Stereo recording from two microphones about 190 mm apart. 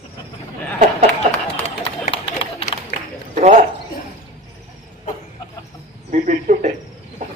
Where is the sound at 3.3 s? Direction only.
40° right (ahead or behind).